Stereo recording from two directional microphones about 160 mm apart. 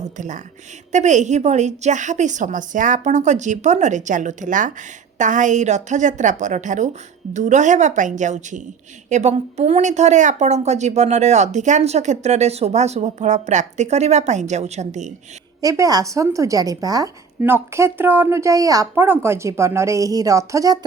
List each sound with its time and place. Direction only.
0.0 s a woman's voice: 50° right (ahead or behind)
15.6 s speech: 20° right (ahead or behind)